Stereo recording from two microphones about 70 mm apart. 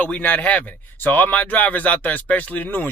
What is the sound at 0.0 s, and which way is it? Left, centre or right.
A man's voice, left.